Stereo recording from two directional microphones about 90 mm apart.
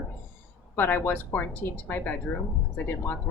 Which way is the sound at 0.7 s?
25° left (ahead or behind).